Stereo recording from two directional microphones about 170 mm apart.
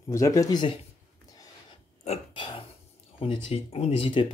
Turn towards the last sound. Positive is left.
turn(degrees=30)  # may be behind; listen again after turning